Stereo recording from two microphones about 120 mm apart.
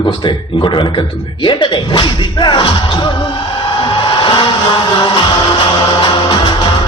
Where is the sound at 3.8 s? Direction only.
40° left (ahead or behind).